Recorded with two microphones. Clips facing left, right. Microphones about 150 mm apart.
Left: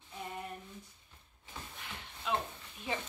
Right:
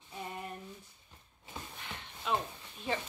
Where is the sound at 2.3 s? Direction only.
Centre (ahead or behind).